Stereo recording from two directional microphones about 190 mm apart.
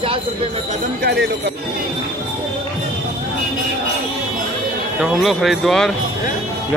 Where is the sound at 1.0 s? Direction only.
60° right (ahead or behind).